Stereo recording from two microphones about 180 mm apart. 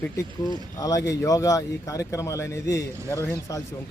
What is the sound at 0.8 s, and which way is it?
A man's voice, 20° left (ahead or behind).